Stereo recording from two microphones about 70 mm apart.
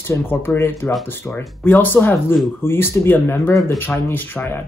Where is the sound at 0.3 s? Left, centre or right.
Left.